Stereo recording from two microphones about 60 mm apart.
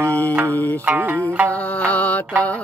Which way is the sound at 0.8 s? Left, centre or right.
Right.